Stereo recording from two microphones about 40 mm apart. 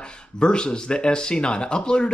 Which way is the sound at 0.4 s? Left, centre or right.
Left.